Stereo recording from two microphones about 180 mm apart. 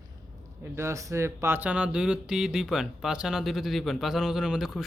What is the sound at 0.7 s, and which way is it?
Speech, 15° right (ahead or behind).